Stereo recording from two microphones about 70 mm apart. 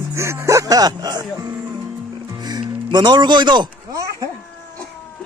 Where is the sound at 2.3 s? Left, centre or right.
Right.